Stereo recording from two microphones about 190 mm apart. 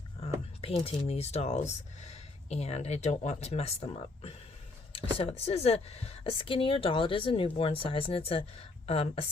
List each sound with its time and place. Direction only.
0.6 s speech: 30° left (ahead or behind)
4.9 s a sound: 30° left (ahead or behind)
5.5 s speech: 35° left (ahead or behind)